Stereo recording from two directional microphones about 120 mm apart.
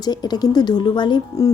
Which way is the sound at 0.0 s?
35° left (ahead or behind).